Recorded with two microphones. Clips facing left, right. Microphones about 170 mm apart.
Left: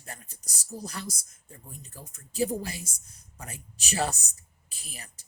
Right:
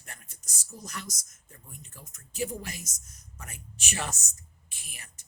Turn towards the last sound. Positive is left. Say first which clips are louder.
# left 5 dB
turn(degrees=35)  # may be behind; listen again after turning